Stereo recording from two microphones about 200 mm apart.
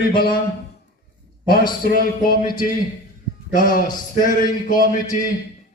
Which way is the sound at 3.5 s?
45° left (ahead or behind).